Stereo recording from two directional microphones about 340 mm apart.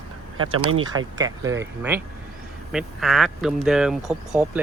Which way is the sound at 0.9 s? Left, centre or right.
Centre.